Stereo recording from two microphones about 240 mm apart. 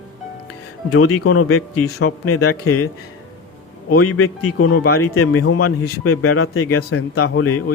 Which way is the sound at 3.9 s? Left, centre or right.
Left.